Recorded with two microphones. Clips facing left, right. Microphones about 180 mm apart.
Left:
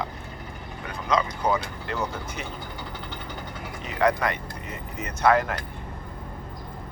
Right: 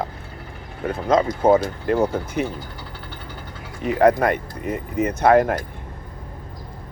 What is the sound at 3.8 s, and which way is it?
Speech, 55° right (ahead or behind).